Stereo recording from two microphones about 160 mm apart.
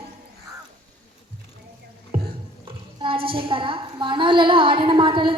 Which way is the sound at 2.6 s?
35° right (ahead or behind).